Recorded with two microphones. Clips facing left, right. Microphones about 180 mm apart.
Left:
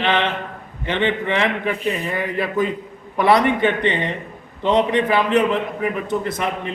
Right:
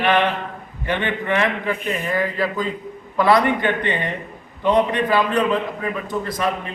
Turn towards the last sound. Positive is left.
turn(degrees=20)  # may be behind; listen again after turning